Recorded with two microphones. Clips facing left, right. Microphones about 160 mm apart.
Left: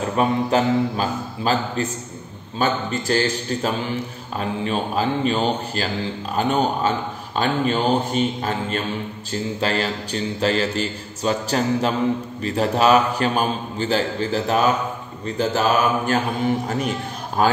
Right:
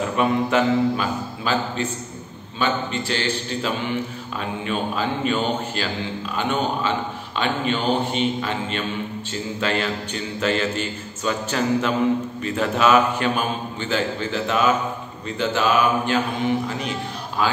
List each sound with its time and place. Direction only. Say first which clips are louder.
0.1 s a man's voice: left 2 dB; 35° left (ahead or behind)